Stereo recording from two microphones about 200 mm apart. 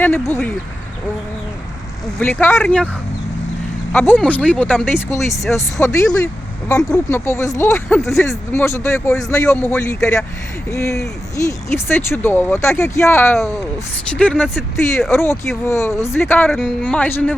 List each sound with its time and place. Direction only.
0.0 s speech: 10° left (ahead or behind)
2.1 s speech: 10° left (ahead or behind)
3.9 s speech: 10° left (ahead or behind)
15.6 s speech: 15° left (ahead or behind)